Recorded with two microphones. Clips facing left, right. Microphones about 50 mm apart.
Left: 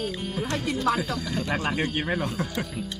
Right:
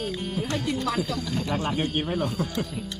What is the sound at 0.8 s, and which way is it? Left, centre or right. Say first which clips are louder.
Speech: left 2 dB; left.